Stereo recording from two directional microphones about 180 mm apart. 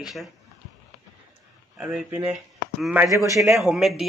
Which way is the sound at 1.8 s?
5° right (ahead or behind).